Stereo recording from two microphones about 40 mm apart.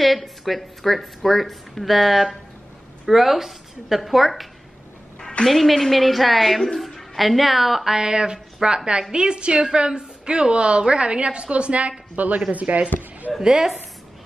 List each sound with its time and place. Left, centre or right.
0.0 s a woman's voice: centre
5.5 s a woman's voice: centre
7.9 s a woman's voice: centre; by 12.8 s right
13.4 s a woman's voice: centre